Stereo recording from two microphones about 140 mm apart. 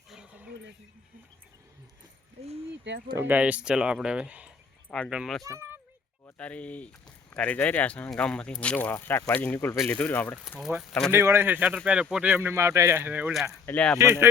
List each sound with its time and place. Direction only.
0.1 s a sound: 5° right (ahead or behind)
3.2 s speech: 10° right (ahead or behind)
4.9 s speech: 5° left (ahead or behind)
5.5 s a sound: 20° right (ahead or behind)
6.3 s speech: 10° left (ahead or behind)
10.8 s speech: centre (ahead or behind)
11.1 s speech: 15° right (ahead or behind)
13.7 s speech: 10° left (ahead or behind)
14.0 s speech: 20° right (ahead or behind)